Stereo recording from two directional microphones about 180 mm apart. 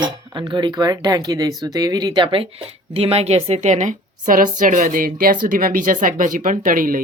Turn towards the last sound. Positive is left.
turn(degrees=-50)  # may be behind; listen again after turning